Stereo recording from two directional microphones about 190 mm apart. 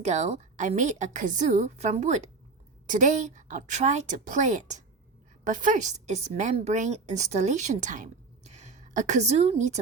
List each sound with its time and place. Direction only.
0.0 s a woman's voice: 35° right (ahead or behind)